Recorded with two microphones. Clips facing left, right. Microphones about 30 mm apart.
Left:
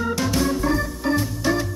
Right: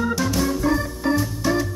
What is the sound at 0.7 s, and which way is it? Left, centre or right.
Organ, centre.